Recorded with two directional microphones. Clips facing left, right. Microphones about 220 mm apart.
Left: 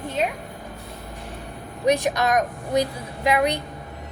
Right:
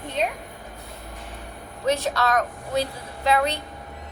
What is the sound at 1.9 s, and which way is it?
A woman's voice, 15° left (ahead or behind).